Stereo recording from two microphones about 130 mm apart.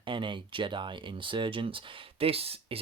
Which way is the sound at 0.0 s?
40° right (ahead or behind).